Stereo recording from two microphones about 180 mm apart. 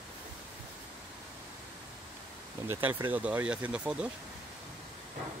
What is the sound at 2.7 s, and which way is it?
Speech, 10° right (ahead or behind).